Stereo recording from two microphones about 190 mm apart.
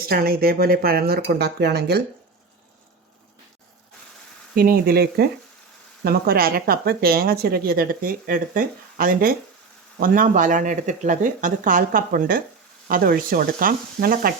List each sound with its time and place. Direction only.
0.0 s speech: 50° right (ahead or behind)
4.5 s speech: 50° right (ahead or behind)